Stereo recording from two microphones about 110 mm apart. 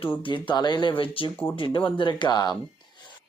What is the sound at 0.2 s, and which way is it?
Speech, 50° left (ahead or behind).